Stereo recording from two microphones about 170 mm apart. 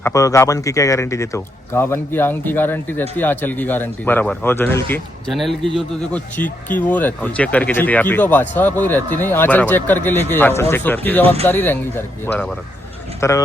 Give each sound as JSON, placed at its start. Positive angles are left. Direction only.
{"t": 0.0, "sound": "speech", "side_deg": 20}
{"t": 5.3, "sound": "a man's voice", "side_deg": 0}